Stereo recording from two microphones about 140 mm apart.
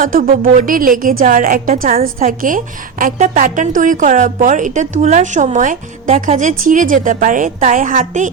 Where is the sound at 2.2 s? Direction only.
70° right (ahead or behind).